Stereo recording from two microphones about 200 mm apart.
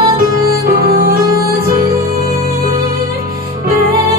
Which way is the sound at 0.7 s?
50° right (ahead or behind).